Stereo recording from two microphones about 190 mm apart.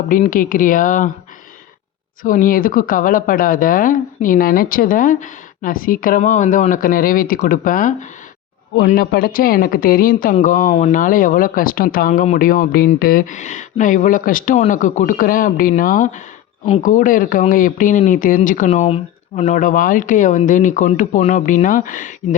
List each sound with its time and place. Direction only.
0.1 s speech: 45° left (ahead or behind)
2.2 s speech: 45° left (ahead or behind)